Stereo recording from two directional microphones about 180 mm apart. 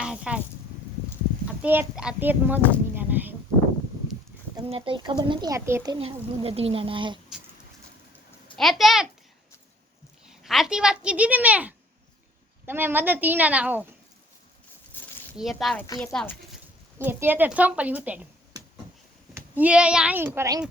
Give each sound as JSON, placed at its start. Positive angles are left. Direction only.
{"t": 0.0, "sound": "a sound", "side_deg": -5}
{"t": 1.6, "sound": "a woman's voice", "side_deg": -10}
{"t": 4.5, "sound": "speech", "side_deg": -25}
{"t": 6.0, "sound": "speech", "side_deg": -30}
{"t": 8.5, "sound": "speech", "side_deg": 0}
{"t": 10.2, "sound": "a woman's voice", "side_deg": 0}
{"t": 15.0, "sound": "a sound", "side_deg": 10}
{"t": 15.4, "sound": "speech", "side_deg": 0}
{"t": 17.0, "sound": "a woman's voice", "side_deg": -10}
{"t": 19.3, "sound": "speech", "side_deg": -10}